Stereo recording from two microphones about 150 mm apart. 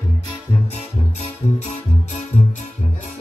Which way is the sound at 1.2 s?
50° left (ahead or behind).